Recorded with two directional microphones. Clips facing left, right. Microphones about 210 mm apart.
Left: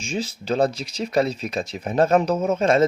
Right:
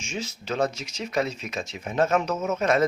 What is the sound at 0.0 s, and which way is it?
Speech, 35° left (ahead or behind).